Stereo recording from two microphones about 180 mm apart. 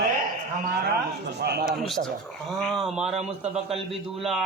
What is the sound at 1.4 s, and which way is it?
Speech, 60° right (ahead or behind).